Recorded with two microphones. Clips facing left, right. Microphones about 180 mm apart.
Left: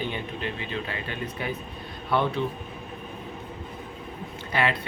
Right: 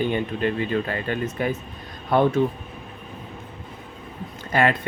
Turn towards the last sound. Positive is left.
turn(degrees=-45)  # may be behind; listen again after turning